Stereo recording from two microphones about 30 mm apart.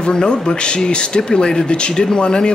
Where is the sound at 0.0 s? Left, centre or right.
Left.